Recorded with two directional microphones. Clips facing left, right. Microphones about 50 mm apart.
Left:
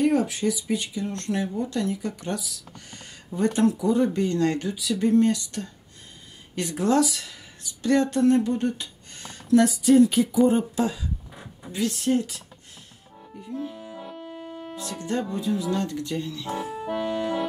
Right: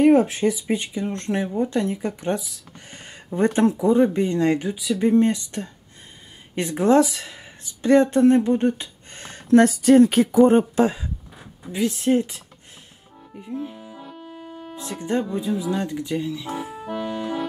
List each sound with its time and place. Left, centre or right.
0.0 s speech: right
11.7 s speech: centre
13.4 s speech: centre
13.8 s music: centre
14.8 s speech: right
16.8 s music: centre